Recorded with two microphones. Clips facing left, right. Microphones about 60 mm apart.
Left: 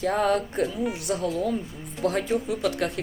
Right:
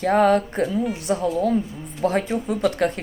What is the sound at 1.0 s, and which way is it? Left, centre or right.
Speech, right.